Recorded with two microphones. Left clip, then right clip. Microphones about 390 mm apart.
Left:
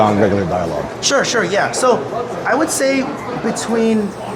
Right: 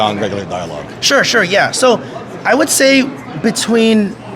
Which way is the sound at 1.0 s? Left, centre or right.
Right.